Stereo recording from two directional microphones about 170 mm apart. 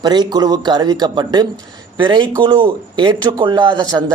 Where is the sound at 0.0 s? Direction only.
25° right (ahead or behind).